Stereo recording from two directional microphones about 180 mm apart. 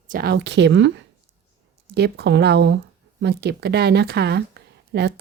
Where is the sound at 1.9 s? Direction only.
65° right (ahead or behind).